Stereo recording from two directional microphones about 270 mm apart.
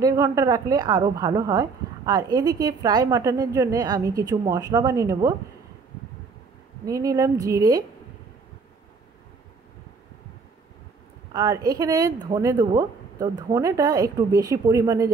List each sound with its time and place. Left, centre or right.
0.0 s a woman's voice: centre
6.9 s a woman's voice: centre
11.3 s a woman's voice: centre